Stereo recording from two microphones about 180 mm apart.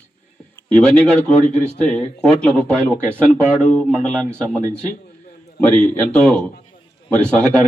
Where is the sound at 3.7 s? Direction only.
5° left (ahead or behind).